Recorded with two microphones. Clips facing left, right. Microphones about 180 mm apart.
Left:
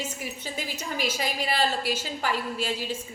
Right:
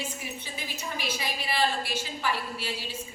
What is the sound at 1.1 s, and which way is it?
A woman's voice, 45° left (ahead or behind).